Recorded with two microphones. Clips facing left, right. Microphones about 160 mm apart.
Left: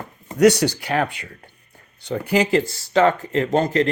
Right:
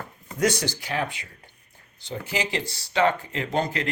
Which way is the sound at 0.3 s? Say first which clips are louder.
Left 10 dB; 70° left (ahead or behind).